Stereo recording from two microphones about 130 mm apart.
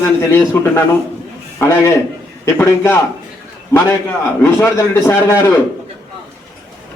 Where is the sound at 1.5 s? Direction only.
20° left (ahead or behind).